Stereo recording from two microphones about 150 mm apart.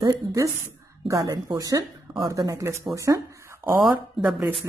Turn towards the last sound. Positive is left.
turn(degrees=-5)  # may be behind; listen again after turning